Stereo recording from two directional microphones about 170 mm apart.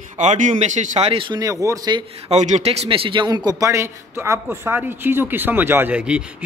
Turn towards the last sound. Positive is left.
turn(degrees=-5)  # may be behind; listen again after turning